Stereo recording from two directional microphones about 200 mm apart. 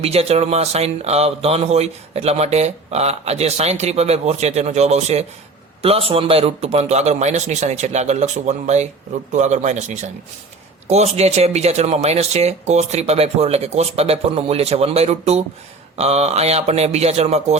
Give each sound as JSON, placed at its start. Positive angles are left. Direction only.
{"t": 0.0, "sound": "speech", "side_deg": -30}